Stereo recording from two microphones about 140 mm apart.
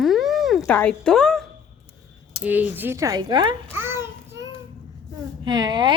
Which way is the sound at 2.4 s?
10° right (ahead or behind).